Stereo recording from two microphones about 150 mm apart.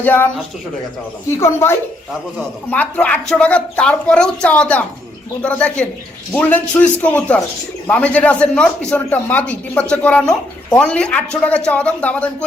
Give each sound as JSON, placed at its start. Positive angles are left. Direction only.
{"t": 0.0, "sound": "speech", "side_deg": 15}
{"t": 1.4, "sound": "speech", "side_deg": 15}